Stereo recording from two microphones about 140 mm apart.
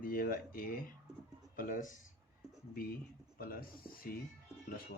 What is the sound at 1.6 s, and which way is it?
Speech, 70° left (ahead or behind).